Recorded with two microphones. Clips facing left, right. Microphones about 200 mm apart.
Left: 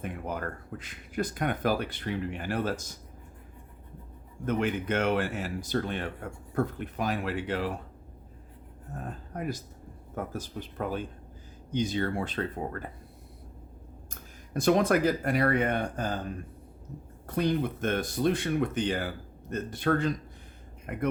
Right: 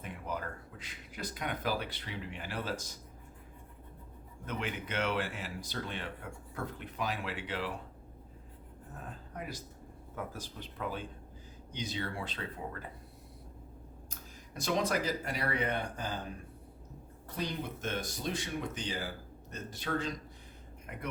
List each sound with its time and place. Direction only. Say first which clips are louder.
0.0 s speech: left 5 dB; 55° left (ahead or behind)
4.4 s speech: left 10 dB; 50° left (ahead or behind)
9.0 s speech: left 7 dB; 50° left (ahead or behind)
14.1 s speech: left 14 dB; 55° left (ahead or behind)
17.2 s speech: left 10 dB; 55° left (ahead or behind)